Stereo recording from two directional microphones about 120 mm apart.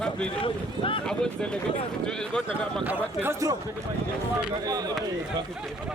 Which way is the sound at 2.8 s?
15° right (ahead or behind).